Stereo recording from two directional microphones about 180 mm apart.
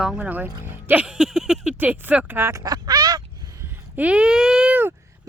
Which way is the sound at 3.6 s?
10° right (ahead or behind).